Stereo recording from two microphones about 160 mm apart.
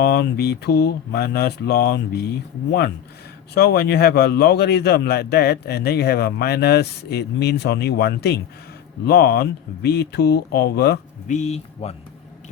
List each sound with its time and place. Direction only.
0.0 s speech: 85° left
3.5 s speech: 90° left
11.3 s speech: 45° left (ahead or behind)